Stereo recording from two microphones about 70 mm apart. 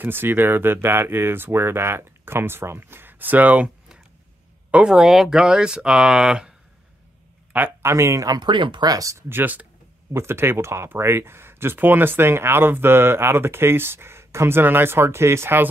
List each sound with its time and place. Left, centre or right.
0.0 s speech: right
4.9 s speech: centre
7.5 s a man's voice: right
7.9 s speech: right
8.4 s speech: right
9.3 s speech: right